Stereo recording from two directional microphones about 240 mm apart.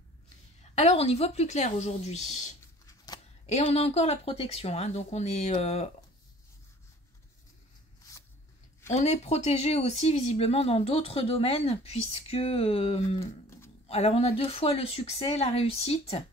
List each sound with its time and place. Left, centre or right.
0.6 s speech: left
3.5 s speech: left
8.9 s speech: left